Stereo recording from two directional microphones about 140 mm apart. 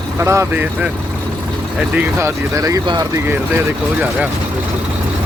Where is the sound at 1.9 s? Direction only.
20° right (ahead or behind).